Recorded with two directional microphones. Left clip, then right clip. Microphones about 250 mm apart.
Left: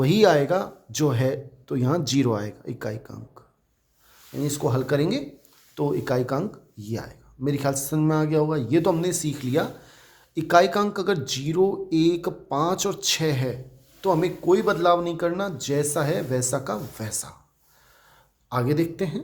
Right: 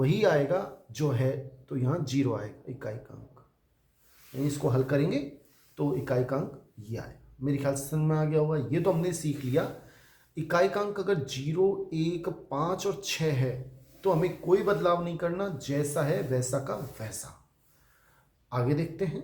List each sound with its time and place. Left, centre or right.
0.0 s speech: left
4.4 s speech: left
18.4 s speech: left